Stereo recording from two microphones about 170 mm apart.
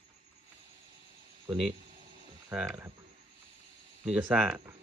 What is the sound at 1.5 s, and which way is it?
Speech, centre (ahead or behind).